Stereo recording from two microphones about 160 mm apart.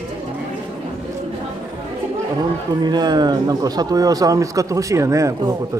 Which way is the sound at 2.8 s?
25° right (ahead or behind).